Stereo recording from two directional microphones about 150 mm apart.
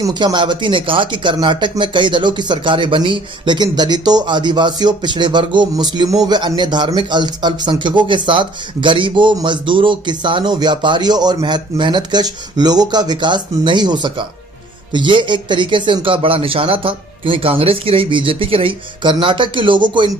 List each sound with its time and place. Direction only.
0.0 s speech: 25° right (ahead or behind)